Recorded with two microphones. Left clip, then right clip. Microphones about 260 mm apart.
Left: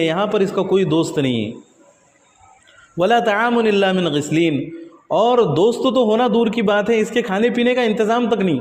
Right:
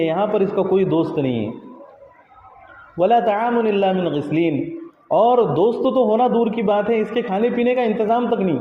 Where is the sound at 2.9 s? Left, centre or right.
Left.